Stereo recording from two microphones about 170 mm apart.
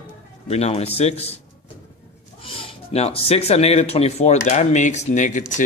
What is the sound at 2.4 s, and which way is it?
Speech, 35° left (ahead or behind).